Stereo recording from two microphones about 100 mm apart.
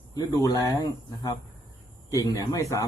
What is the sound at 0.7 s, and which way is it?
Speech, 45° left (ahead or behind).